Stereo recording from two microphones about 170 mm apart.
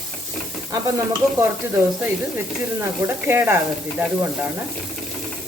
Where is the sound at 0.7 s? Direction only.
20° right (ahead or behind).